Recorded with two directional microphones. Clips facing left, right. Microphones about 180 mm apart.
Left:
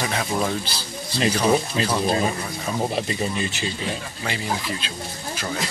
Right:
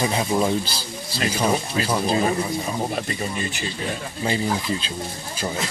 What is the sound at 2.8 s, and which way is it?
Speech, centre (ahead or behind).